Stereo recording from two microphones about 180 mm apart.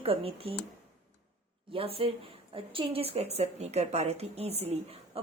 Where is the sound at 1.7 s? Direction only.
30° right (ahead or behind).